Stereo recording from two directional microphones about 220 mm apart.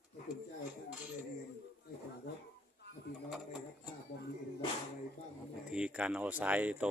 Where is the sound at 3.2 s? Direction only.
5° right (ahead or behind).